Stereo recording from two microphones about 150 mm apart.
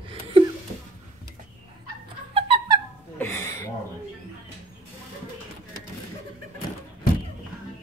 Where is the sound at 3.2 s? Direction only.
15° left (ahead or behind).